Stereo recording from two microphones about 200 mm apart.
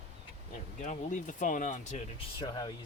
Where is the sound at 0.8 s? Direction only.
40° left (ahead or behind).